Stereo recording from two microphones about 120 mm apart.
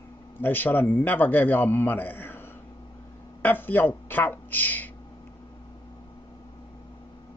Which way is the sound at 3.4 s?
15° left (ahead or behind).